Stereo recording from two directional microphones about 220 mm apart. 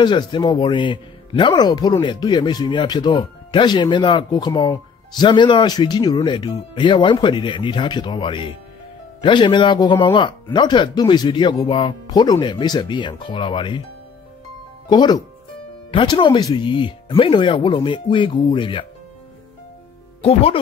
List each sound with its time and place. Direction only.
0.0 s speech: 20° left (ahead or behind)
14.9 s speech: 20° left (ahead or behind)
20.2 s speech: 25° left (ahead or behind)